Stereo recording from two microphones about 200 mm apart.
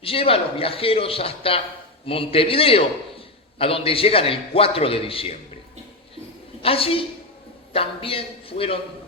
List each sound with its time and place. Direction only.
0.0 s a man's voice: 30° left (ahead or behind)
6.6 s a woman's voice: 30° left (ahead or behind)